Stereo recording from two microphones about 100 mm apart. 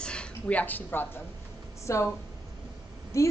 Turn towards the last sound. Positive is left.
turn(degrees=30)  # may be behind; listen again after turning